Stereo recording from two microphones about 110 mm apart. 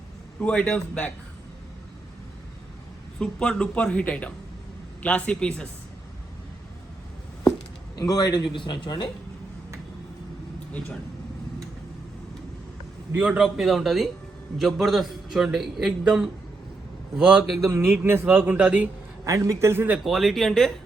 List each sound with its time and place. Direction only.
0.3 s speech: 10° left (ahead or behind)
3.2 s speech: 10° left (ahead or behind)
7.9 s a man's voice: 35° left (ahead or behind)
13.1 s a man's voice: 15° right (ahead or behind)
13.4 s a man's voice: centre (ahead or behind)
17.7 s a man's voice: 20° right (ahead or behind)
19.2 s a man's voice: 30° right (ahead or behind)
20.1 s a man's voice: centre (ahead or behind)